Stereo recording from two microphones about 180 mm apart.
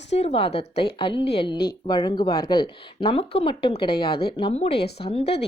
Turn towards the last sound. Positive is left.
turn(degrees=35)  # may be behind; listen again after turning